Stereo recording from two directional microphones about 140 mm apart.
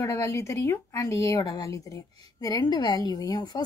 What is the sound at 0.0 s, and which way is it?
A woman's voice, 20° left (ahead or behind).